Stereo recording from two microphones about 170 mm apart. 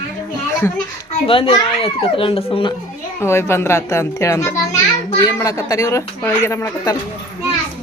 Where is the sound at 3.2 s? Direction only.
15° left (ahead or behind).